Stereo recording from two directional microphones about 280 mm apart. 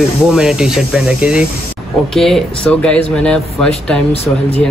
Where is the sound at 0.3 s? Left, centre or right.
Centre.